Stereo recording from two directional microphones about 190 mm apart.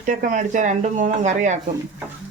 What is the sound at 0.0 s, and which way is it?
Speech, 45° right (ahead or behind).